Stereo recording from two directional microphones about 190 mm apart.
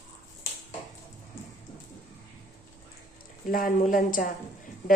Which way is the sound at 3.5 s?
45° left (ahead or behind).